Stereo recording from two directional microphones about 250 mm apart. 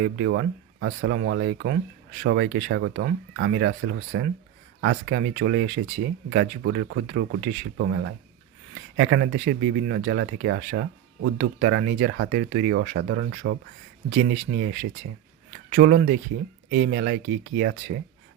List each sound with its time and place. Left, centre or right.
0.0 s speech: right
5.3 s speech: right
7.8 s speech: right
10.0 s speech: right
14.1 s speech: right